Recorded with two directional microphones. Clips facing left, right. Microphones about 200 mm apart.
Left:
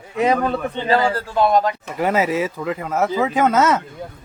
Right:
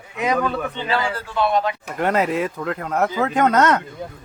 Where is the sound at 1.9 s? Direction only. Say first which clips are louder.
Left 1 dB; 5° left (ahead or behind).